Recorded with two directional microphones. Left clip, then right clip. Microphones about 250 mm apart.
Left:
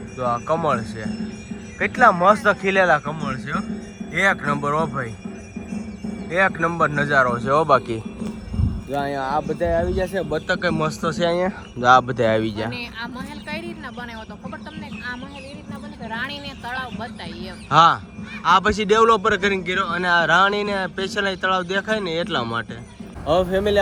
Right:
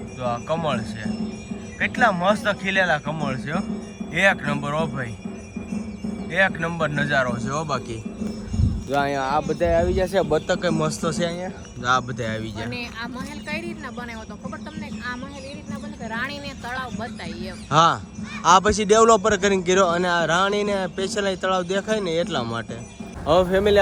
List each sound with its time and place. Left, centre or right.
0.2 s a man's voice: centre
5.5 s music: centre
7.4 s a man's voice: centre
8.9 s a man's voice: centre
10.2 s speech: right
10.4 s a man's voice: centre
16.0 s a man's voice: centre